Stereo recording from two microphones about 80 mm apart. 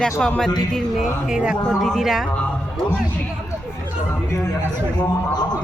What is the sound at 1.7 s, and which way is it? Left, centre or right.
Speech, centre.